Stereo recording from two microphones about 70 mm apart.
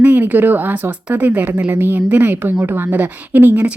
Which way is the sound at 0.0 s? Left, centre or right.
Right.